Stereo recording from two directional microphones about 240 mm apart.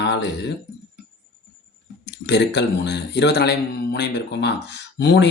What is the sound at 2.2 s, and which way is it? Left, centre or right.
Speech, left.